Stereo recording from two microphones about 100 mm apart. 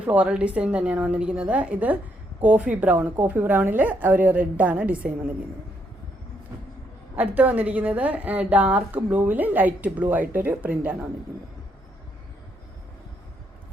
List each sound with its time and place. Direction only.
0.0 s a woman's voice: 15° right (ahead or behind)
7.2 s a woman's voice: 15° right (ahead or behind)